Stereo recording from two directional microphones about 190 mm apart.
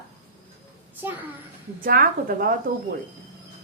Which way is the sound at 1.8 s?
50° right (ahead or behind).